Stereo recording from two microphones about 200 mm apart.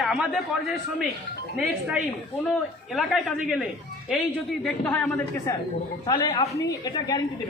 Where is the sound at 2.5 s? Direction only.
Centre (ahead or behind).